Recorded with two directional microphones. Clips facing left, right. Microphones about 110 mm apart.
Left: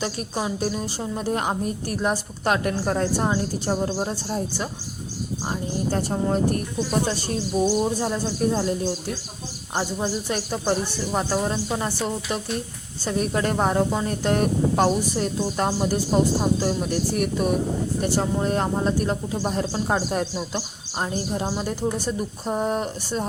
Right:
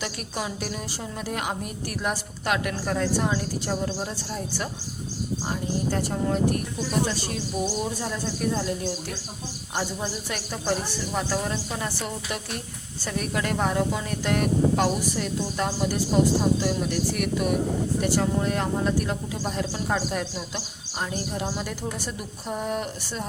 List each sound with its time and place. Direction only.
0.0 s a woman's voice: 30° left (ahead or behind)
5.5 s a woman's voice: 30° left (ahead or behind)
8.0 s a woman's voice: 30° left (ahead or behind)